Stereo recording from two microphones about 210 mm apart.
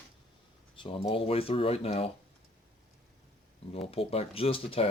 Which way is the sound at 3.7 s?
30° left (ahead or behind).